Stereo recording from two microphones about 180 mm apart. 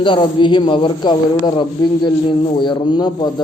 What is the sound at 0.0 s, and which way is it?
A man's voice, 25° left (ahead or behind).